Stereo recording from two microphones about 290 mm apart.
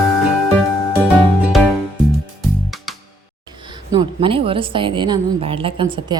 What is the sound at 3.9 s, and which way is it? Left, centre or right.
A woman's voice, centre.